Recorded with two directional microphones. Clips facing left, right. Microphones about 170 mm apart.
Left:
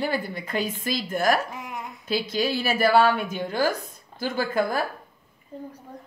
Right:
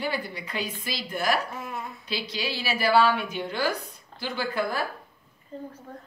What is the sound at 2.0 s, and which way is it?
A woman's voice, 50° left (ahead or behind).